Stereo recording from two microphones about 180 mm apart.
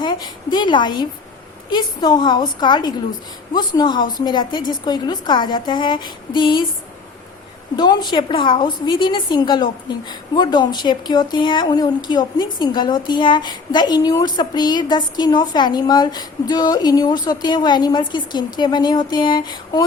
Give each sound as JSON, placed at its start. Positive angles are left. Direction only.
{"t": 0.0, "sound": "a woman's voice", "side_deg": 25}
{"t": 7.8, "sound": "a woman's voice", "side_deg": 25}